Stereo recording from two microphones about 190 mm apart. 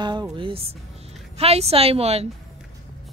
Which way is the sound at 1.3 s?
35° right (ahead or behind).